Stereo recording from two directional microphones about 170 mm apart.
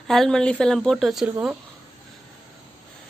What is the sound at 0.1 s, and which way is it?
A woman's voice, centre (ahead or behind).